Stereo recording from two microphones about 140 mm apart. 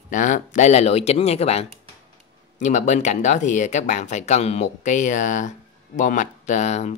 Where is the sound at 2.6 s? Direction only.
60° left (ahead or behind).